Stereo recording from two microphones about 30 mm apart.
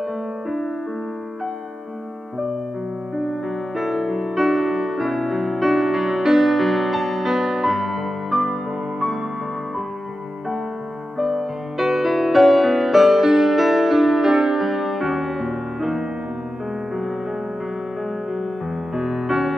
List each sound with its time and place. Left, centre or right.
3.7 s music: centre
5.0 s music: centre
7.2 s music: centre
11.1 s music: centre
12.1 s music: centre
14.2 s music: centre
18.9 s music: centre